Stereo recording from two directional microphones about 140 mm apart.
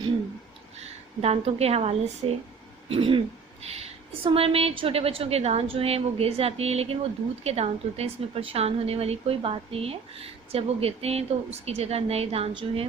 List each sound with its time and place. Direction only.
0.8 s speech: 50° right (ahead or behind)